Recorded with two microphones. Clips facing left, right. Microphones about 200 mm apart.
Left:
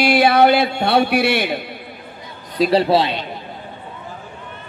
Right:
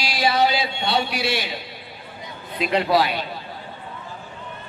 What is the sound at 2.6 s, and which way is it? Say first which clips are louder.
Speech: left 5 dB; 35° left (ahead or behind).